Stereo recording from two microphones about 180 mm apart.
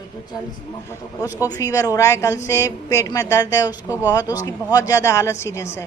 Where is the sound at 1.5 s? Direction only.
20° left (ahead or behind).